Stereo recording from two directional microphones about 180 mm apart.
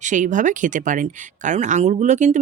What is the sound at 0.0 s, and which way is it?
Speech, 45° right (ahead or behind).